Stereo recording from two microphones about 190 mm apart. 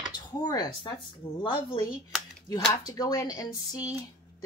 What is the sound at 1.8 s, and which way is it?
Speech, 5° right (ahead or behind).